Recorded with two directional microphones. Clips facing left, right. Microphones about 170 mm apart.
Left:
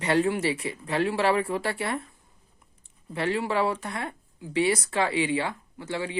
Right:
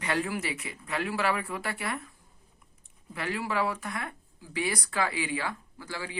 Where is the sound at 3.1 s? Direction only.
30° left (ahead or behind).